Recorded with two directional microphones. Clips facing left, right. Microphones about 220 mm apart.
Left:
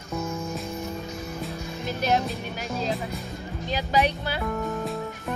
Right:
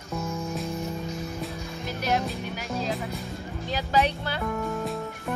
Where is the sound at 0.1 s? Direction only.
Centre (ahead or behind).